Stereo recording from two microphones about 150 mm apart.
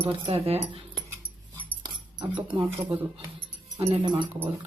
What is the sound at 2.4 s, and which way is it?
Speech, 35° right (ahead or behind).